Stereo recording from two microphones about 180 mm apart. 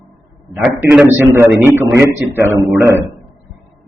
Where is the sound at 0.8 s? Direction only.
5° right (ahead or behind).